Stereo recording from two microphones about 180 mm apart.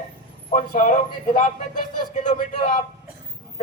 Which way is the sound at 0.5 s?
45° left (ahead or behind).